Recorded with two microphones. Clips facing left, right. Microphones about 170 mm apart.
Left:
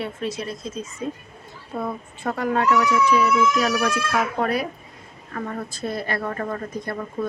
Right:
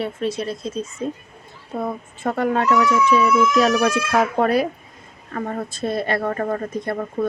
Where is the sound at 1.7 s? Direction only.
45° right (ahead or behind).